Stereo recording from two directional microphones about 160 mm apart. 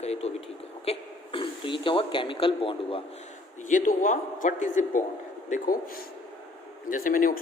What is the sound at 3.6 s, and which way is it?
A man's voice, 55° left (ahead or behind).